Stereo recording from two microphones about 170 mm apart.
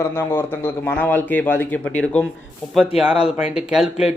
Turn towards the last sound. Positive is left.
turn(degrees=-5)  # may be behind; listen again after turning